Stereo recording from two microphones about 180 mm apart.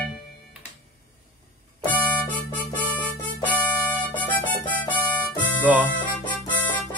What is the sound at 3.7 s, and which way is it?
Harmonica, 10° left (ahead or behind).